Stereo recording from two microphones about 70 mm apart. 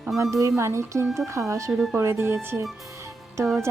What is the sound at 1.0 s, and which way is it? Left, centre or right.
Speech, centre.